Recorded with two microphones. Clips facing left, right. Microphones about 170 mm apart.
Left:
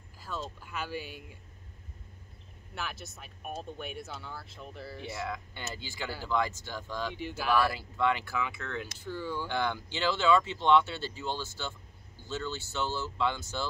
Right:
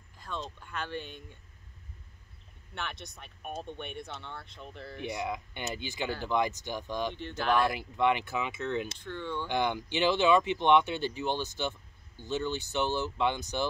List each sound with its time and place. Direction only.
0.2 s speech: 5° left (ahead or behind)
2.7 s speech: 5° left (ahead or behind)
5.0 s speech: 20° right (ahead or behind)
7.2 s speech: 5° left (ahead or behind)
7.5 s speech: 20° right (ahead or behind)
8.9 s speech: 5° left (ahead or behind)
9.5 s speech: 15° right (ahead or behind)